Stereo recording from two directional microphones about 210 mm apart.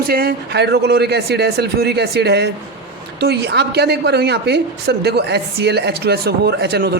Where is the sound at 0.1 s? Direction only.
45° right (ahead or behind).